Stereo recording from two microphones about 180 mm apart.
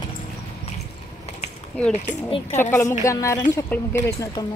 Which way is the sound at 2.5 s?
15° left (ahead or behind).